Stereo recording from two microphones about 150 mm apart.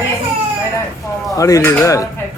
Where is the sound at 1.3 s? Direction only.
20° left (ahead or behind).